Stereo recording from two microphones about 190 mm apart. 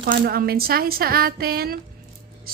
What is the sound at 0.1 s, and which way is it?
A woman's voice, 50° right (ahead or behind).